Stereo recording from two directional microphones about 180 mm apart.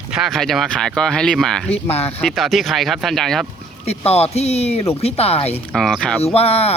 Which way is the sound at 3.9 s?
35° left (ahead or behind).